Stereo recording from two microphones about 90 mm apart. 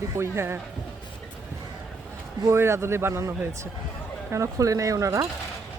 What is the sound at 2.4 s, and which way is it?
A man's voice, 30° right (ahead or behind).